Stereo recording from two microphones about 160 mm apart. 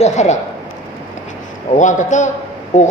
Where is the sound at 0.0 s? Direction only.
45° left (ahead or behind).